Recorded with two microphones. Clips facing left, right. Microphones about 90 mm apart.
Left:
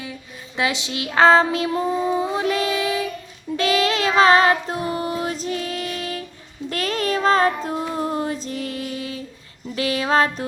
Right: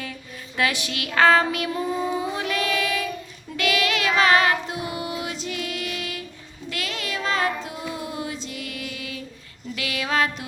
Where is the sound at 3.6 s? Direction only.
30° left (ahead or behind).